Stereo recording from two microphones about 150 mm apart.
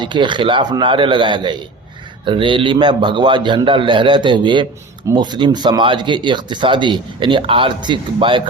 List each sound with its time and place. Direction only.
0.0 s speech: 30° right (ahead or behind)